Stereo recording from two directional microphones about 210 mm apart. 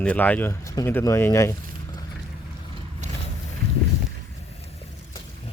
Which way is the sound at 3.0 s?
35° right (ahead or behind).